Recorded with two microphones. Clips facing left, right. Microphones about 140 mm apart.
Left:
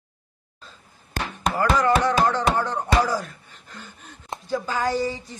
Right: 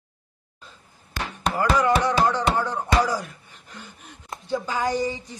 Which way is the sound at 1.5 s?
10° right (ahead or behind).